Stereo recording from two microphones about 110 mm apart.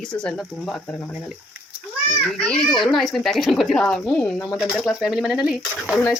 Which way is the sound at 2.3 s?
10° left (ahead or behind).